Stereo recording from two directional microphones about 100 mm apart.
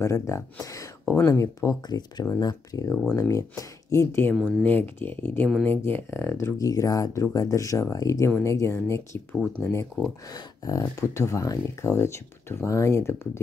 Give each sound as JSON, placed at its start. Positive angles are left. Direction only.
{"t": 0.0, "sound": "speech", "side_deg": 30}
{"t": 2.9, "sound": "speech", "side_deg": 10}
{"t": 3.2, "sound": "speech", "side_deg": 30}
{"t": 6.6, "sound": "speech", "side_deg": 35}